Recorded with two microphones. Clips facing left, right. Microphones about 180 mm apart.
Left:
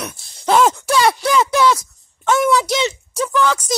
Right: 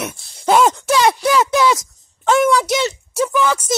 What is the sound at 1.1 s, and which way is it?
Speech, 5° right (ahead or behind).